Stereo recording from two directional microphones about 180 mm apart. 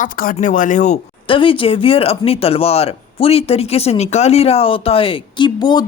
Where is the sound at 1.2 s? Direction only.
30° left (ahead or behind).